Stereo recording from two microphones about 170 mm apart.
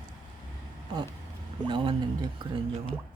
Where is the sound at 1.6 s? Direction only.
30° right (ahead or behind).